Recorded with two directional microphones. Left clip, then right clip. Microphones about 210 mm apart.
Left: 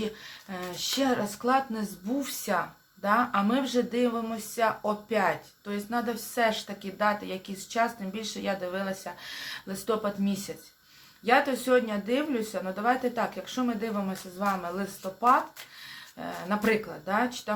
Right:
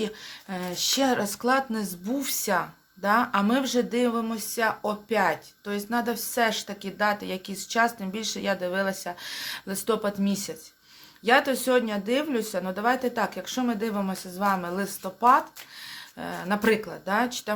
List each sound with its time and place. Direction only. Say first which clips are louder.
0.0 s speech: right 3 dB; 45° right (ahead or behind)